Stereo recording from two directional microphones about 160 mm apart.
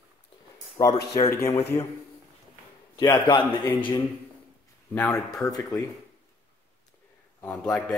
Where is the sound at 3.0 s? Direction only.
25° left (ahead or behind).